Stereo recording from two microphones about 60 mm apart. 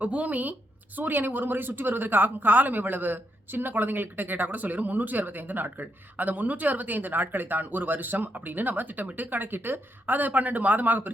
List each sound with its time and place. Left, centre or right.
0.0 s speech: right